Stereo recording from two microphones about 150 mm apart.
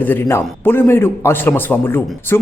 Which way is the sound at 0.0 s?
15° left (ahead or behind).